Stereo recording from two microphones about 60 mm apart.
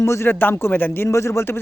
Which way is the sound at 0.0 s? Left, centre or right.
Left.